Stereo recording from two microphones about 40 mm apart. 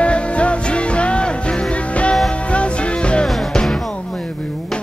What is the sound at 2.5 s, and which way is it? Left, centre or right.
Music, left.